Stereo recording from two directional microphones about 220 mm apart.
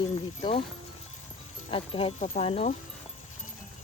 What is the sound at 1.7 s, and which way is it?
Speech, 25° left (ahead or behind).